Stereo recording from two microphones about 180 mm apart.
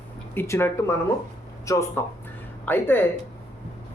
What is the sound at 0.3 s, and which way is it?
A man's voice, 15° left (ahead or behind).